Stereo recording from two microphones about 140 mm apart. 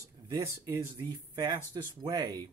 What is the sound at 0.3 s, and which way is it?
Speech, 20° right (ahead or behind).